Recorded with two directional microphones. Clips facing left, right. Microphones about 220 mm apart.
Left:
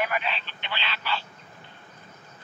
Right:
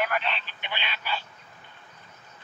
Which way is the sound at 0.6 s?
15° right (ahead or behind).